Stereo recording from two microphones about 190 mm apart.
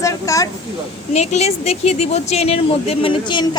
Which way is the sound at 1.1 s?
35° left (ahead or behind).